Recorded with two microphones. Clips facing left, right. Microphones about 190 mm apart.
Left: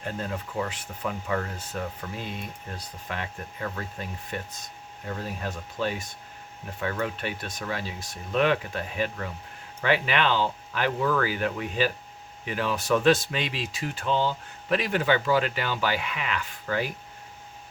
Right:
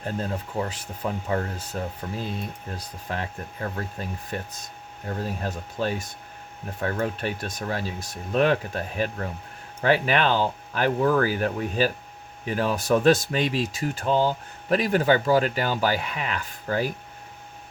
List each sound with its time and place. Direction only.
0.6 s speech: 30° right (ahead or behind)